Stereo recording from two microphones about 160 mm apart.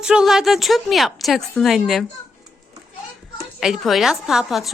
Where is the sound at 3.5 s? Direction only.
Centre (ahead or behind).